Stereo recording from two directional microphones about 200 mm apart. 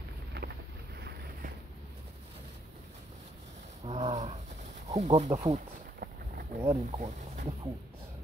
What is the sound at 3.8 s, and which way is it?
Roaring cats, 30° right (ahead or behind).